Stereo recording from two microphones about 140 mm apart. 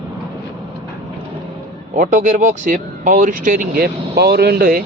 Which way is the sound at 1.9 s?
70° right (ahead or behind).